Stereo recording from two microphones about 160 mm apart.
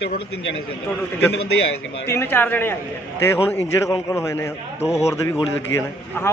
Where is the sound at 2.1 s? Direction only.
15° left (ahead or behind).